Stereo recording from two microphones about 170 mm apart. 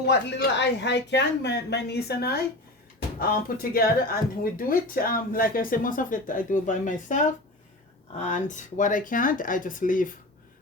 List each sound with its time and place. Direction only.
0.0 s speech: 85° left; by 7.2 s 50° left (ahead or behind)
8.2 s speech: 45° left (ahead or behind)